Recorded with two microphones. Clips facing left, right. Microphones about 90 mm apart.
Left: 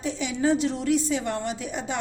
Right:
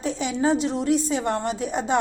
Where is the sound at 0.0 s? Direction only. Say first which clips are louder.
Right 3 dB; 40° right (ahead or behind).